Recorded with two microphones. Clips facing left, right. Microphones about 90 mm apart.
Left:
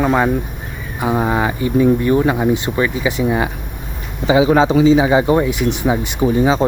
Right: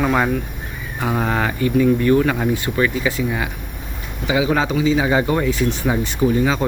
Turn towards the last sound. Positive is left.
turn(degrees=25)  # may be behind; listen again after turning